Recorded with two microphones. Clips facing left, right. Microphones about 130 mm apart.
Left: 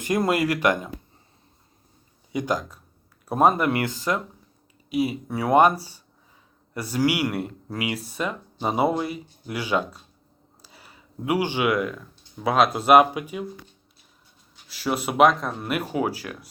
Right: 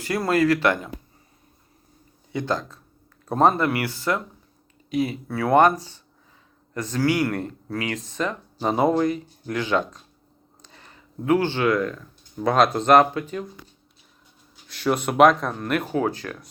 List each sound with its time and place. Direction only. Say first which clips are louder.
0.0 s speech: right 1 dB; 20° left (ahead or behind)
2.3 s speech: even; 10° left (ahead or behind)
10.6 s a sound: right 1 dB; 10° left (ahead or behind)
12.4 s speech: right 1 dB; 5° left (ahead or behind)
14.7 s speech: right 3 dB; 5° left (ahead or behind)